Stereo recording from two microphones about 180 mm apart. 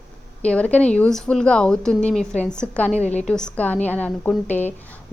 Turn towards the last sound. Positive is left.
turn(degrees=10)  # may be behind; listen again after turning